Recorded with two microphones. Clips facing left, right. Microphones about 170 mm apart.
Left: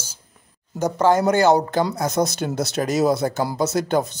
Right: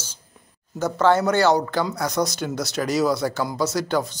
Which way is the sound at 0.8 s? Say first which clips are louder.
Left 1 dB; 20° left (ahead or behind).